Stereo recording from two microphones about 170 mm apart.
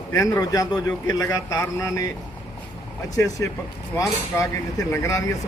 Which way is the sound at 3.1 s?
20° left (ahead or behind).